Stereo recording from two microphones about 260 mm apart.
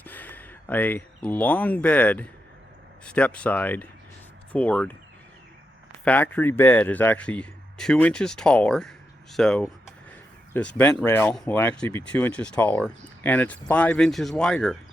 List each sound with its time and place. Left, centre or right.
0.0 s speech: centre
6.1 s speech: centre